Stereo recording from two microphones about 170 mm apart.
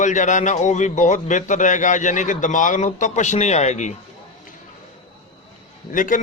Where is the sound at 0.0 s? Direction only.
45° left (ahead or behind).